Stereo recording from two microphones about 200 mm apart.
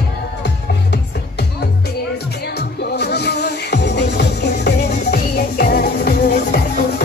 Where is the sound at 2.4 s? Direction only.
55° left (ahead or behind).